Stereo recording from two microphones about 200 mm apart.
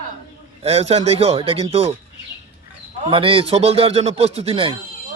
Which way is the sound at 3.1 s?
25° right (ahead or behind).